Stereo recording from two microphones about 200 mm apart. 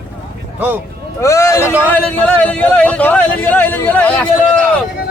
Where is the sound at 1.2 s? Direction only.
15° left (ahead or behind).